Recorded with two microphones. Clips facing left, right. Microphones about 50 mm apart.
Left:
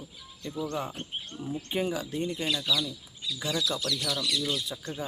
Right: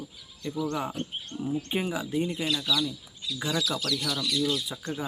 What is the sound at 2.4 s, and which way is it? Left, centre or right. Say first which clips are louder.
Speech: right 1 dB; centre.